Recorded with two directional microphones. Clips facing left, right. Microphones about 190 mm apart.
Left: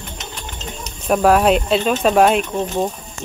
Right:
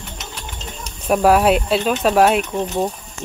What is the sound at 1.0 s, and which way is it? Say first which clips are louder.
Speech: even; 5° right (ahead or behind).